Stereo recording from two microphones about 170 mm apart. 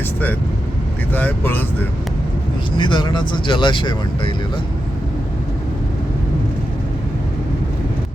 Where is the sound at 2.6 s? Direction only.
30° left (ahead or behind).